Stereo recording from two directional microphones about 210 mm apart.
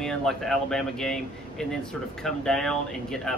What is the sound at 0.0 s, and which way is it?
Speech, centre (ahead or behind).